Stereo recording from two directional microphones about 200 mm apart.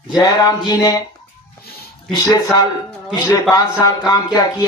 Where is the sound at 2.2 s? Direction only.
20° left (ahead or behind).